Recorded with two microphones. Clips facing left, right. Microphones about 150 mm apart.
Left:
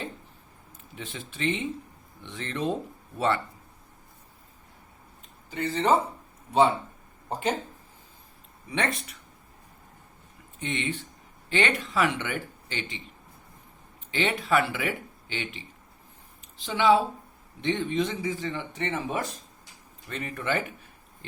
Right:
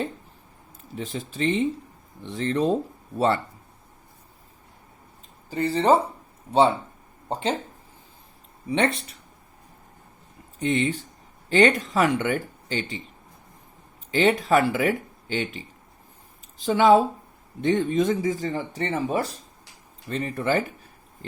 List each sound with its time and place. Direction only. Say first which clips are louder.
0.9 s speech: right 7 dB; 40° right (ahead or behind)
5.5 s speech: right 4 dB; 35° right (ahead or behind)
7.3 s speech: right 2 dB; 25° right (ahead or behind)
8.7 s speech: right 6 dB; 30° right (ahead or behind)
10.6 s speech: right 8 dB; 40° right (ahead or behind)
14.1 s speech: right 6 dB; 40° right (ahead or behind)